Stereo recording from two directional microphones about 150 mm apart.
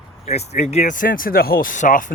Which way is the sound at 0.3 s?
45° left (ahead or behind).